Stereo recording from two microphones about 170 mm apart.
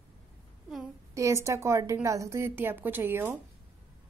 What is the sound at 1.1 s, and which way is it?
A woman's voice, 15° right (ahead or behind).